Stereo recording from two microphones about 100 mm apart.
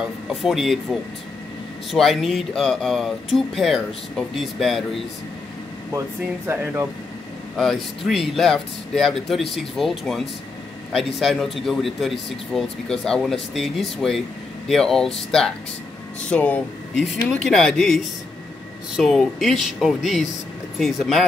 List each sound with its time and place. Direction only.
0.3 s speech: centre (ahead or behind)
5.9 s speech: 25° right (ahead or behind)
7.5 s speech: centre (ahead or behind)
16.3 s speech: 15° left (ahead or behind)
16.9 s speech: 5° left (ahead or behind)